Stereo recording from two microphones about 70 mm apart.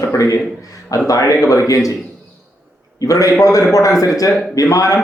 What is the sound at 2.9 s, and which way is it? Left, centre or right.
A man's voice, left.